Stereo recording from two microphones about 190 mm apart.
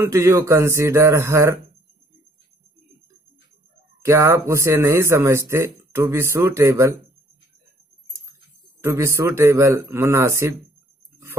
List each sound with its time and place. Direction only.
0.0 s speech: 15° right (ahead or behind)
4.0 s speech: 15° right (ahead or behind)
8.8 s speech: 15° right (ahead or behind)